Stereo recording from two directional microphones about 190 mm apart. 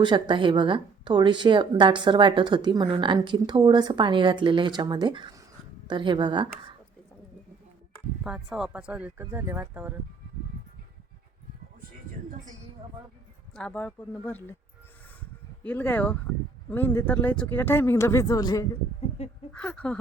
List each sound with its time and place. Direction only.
0.0 s speech: 25° right (ahead or behind)
8.2 s speech: 5° right (ahead or behind)
13.6 s speech: 10° left (ahead or behind)
15.6 s speech: 10° left (ahead or behind)
19.2 s a sound: 35° left (ahead or behind)
19.5 s speech: 5° left (ahead or behind)